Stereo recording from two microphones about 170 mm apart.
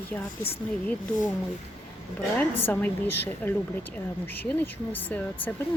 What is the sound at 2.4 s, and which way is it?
Speech, 10° left (ahead or behind).